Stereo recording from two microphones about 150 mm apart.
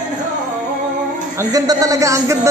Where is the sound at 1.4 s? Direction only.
25° right (ahead or behind).